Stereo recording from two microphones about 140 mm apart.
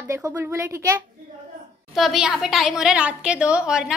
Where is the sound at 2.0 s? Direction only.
Centre (ahead or behind).